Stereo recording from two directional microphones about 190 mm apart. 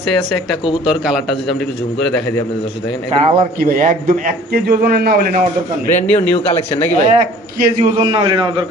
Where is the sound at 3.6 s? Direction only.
45° right (ahead or behind).